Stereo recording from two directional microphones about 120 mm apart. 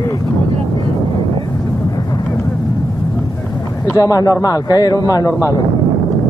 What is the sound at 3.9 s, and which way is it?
A man's voice, 30° left (ahead or behind).